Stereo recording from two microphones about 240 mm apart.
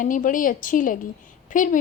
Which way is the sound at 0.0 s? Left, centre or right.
Left.